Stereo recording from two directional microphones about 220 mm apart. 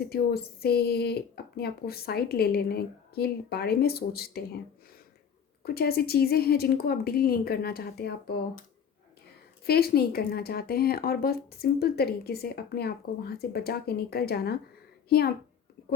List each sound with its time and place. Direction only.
0.0 s speech: 45° left (ahead or behind)
5.6 s speech: 45° left (ahead or behind)
9.6 s speech: 45° left (ahead or behind)